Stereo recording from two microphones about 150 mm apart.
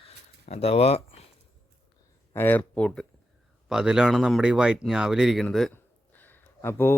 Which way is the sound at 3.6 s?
5° right (ahead or behind).